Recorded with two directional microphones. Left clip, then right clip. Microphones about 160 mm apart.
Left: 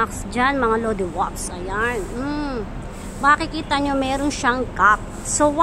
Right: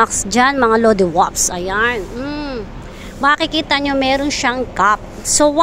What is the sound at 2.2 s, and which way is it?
Vehicle, centre (ahead or behind).